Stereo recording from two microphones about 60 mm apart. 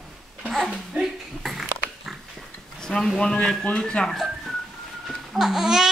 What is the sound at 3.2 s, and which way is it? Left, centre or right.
Speech, centre.